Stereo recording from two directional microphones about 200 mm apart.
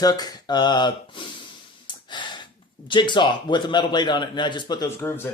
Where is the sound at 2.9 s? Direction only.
25° left (ahead or behind).